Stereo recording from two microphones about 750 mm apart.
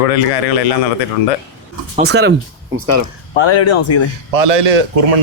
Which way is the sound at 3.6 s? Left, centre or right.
Centre.